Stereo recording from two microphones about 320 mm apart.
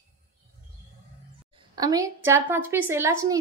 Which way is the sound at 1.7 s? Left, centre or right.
Centre.